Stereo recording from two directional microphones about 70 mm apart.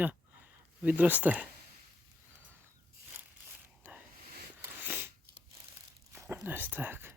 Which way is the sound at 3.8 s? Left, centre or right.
Right.